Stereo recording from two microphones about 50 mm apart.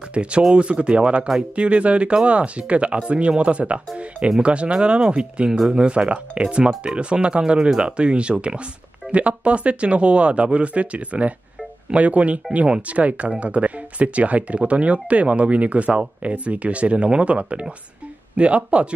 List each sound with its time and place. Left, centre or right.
0.1 s speech: right